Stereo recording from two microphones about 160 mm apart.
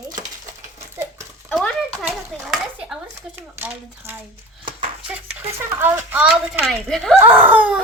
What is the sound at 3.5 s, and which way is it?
Speech, 10° right (ahead or behind).